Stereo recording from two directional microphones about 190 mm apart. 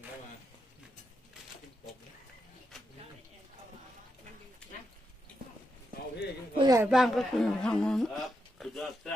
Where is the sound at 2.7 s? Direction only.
Centre (ahead or behind).